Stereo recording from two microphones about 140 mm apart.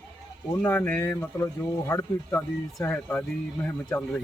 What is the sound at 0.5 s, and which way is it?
Speech, 15° left (ahead or behind).